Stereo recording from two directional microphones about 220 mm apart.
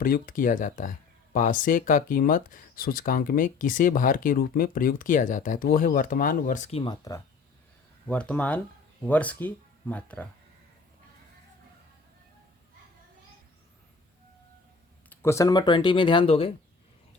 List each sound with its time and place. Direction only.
0.0 s speech: 40° left (ahead or behind); by 7.2 s 15° left (ahead or behind)
8.0 s speech: 5° left (ahead or behind)
15.1 s speech: 10° left (ahead or behind)